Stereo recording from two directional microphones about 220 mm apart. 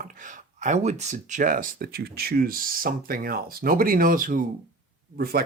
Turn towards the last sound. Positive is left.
turn(degrees=-40)  # may be behind; listen again after turning